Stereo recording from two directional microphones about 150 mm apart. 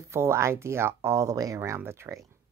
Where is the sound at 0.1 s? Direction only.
20° right (ahead or behind).